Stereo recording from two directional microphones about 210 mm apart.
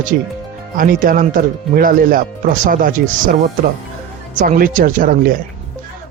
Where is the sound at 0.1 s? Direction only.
45° right (ahead or behind).